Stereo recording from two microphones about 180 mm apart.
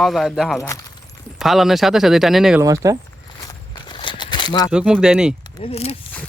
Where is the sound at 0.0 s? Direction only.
Centre (ahead or behind).